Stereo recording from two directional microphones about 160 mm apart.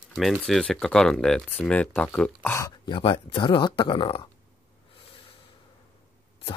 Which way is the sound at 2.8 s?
30° left (ahead or behind).